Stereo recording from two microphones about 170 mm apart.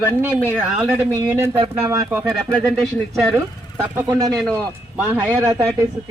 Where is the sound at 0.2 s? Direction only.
10° right (ahead or behind).